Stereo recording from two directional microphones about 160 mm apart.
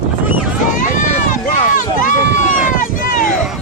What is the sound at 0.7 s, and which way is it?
Run, 55° left (ahead or behind).